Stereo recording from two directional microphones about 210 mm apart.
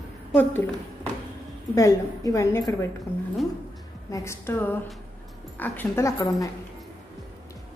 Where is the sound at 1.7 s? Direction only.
15° left (ahead or behind).